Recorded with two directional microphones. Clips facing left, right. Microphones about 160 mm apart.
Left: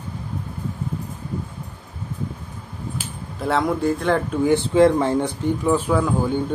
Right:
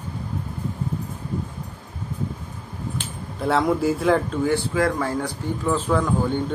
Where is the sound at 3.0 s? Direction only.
Centre (ahead or behind).